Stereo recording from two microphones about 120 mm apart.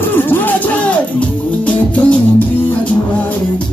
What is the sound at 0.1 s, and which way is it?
Music, 15° left (ahead or behind).